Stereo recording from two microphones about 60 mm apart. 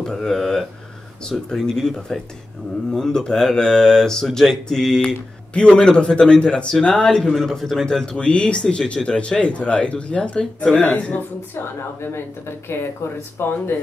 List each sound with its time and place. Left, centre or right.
0.0 s speech: centre
7.3 s a man's voice: centre
10.9 s speech: left
11.5 s speech: left